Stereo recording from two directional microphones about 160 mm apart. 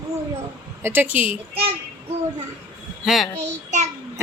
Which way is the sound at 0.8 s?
10° right (ahead or behind).